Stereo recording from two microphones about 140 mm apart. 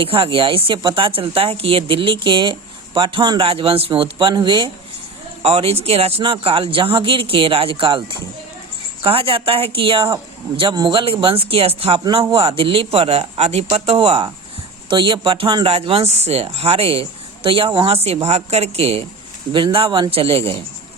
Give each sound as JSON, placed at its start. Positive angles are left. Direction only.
{"t": 0.0, "sound": "speech", "side_deg": -40}
{"t": 11.9, "sound": "a woman's voice", "side_deg": -30}